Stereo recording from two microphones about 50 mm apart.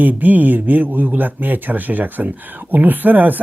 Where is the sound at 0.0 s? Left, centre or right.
Right.